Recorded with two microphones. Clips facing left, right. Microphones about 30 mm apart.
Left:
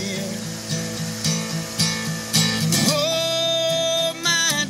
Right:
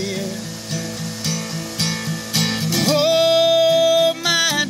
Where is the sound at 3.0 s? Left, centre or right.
Centre.